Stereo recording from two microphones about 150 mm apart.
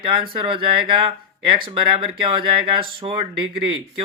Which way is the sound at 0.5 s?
35° right (ahead or behind).